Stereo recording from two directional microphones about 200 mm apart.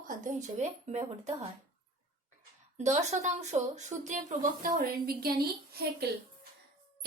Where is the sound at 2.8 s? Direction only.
35° right (ahead or behind).